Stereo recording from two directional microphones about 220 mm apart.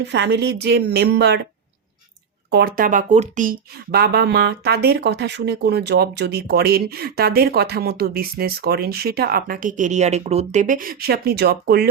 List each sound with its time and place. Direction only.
0.0 s speech: 50° right (ahead or behind)
2.5 s speech: 45° right (ahead or behind)
3.9 s speech: 45° right (ahead or behind)